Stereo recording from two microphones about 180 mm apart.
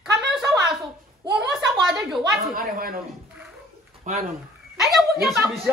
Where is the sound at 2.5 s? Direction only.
55° right (ahead or behind).